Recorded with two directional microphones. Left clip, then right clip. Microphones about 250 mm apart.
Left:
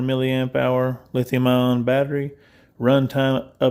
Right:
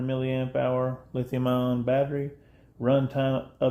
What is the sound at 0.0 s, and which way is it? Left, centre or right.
Speech, left.